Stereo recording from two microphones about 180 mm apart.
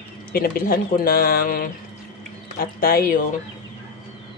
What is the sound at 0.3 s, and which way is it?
Speech, 55° left (ahead or behind).